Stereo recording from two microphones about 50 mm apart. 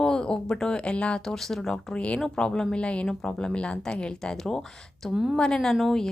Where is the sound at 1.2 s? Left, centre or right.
Centre.